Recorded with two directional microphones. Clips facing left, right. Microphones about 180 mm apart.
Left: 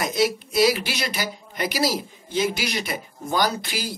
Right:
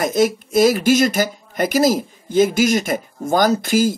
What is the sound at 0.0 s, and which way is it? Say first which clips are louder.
Speech: right 6 dB; 50° right (ahead or behind).